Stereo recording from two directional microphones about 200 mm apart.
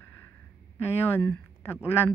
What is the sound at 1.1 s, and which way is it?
Speech, 10° left (ahead or behind).